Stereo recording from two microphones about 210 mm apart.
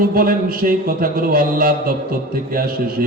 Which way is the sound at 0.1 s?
45° right (ahead or behind).